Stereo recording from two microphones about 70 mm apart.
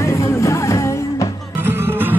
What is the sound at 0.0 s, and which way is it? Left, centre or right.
Music, left.